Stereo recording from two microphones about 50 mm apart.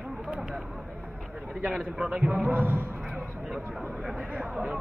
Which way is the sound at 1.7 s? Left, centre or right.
Centre.